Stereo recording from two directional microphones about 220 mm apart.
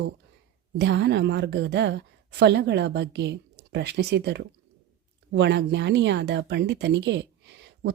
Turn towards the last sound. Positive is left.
turn(degrees=-50)  # may be behind; listen again after turning